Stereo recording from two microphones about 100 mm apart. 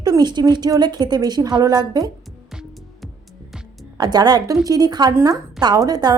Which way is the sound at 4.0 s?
45° right (ahead or behind).